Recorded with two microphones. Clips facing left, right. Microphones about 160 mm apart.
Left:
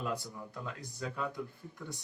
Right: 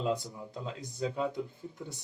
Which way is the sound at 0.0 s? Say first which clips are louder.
Right 5 dB; 20° right (ahead or behind).